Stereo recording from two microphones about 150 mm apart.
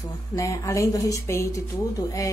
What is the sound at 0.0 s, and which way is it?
A woman's voice, 20° left (ahead or behind).